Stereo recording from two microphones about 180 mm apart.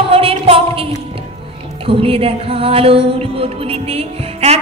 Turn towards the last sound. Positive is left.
turn(degrees=-35)  # may be behind; listen again after turning